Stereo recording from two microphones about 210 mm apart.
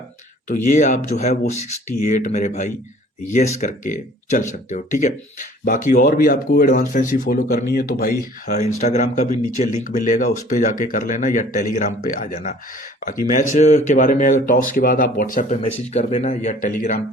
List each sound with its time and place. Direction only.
0.4 s speech: 40° left (ahead or behind)
8.4 s speech: 35° left (ahead or behind)